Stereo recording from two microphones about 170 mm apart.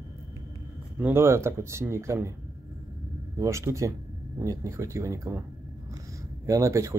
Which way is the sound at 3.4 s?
15° right (ahead or behind).